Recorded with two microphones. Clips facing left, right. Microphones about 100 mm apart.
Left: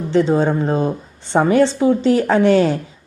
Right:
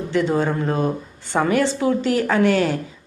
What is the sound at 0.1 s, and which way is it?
A woman's voice, 25° left (ahead or behind).